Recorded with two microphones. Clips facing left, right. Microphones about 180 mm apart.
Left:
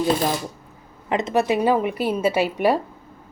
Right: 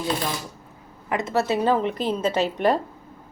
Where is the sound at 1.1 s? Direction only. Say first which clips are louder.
Left 3 dB; 15° left (ahead or behind).